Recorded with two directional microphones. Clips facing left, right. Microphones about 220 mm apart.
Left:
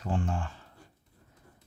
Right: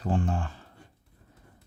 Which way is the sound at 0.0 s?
35° right (ahead or behind).